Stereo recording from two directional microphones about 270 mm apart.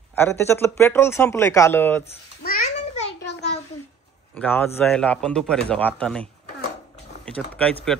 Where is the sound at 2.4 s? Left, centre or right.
Left.